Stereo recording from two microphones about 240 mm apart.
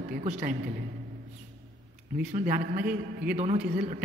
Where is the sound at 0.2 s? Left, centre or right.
Right.